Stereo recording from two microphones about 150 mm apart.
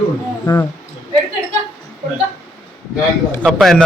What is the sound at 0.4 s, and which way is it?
Speech, 20° left (ahead or behind).